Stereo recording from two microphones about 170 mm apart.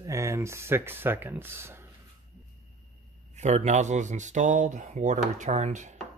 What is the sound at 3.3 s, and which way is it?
Speech, 40° right (ahead or behind).